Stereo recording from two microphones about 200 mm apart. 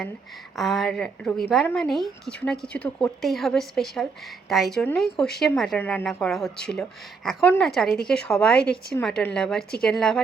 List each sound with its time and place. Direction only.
0.5 s a woman's voice: centre (ahead or behind)